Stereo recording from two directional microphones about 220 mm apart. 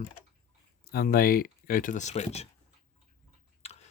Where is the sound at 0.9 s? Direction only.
40° left (ahead or behind).